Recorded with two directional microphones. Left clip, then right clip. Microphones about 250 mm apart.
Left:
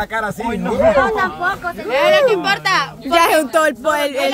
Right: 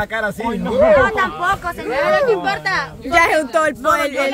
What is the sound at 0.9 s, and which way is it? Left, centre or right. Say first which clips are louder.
Speech: even; centre.